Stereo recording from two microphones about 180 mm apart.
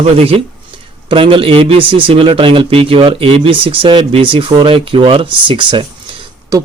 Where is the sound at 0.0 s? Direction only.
35° right (ahead or behind).